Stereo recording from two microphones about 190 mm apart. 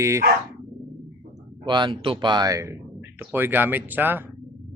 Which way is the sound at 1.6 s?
25° right (ahead or behind).